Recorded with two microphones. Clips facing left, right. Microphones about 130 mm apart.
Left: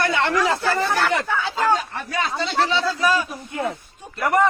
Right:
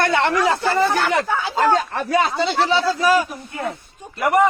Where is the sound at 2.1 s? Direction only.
30° right (ahead or behind).